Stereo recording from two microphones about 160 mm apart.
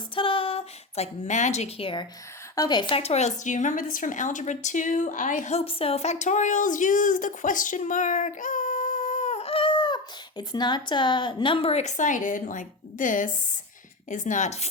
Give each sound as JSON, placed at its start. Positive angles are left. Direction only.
{"t": 0.2, "sound": "speech", "side_deg": 35}